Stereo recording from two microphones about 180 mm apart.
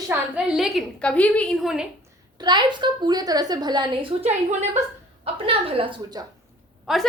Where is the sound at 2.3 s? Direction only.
25° right (ahead or behind).